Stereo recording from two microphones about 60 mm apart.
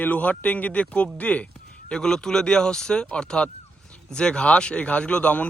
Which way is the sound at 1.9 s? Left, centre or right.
Centre.